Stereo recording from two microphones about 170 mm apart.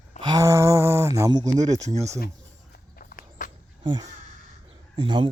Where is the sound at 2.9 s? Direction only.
55° left (ahead or behind).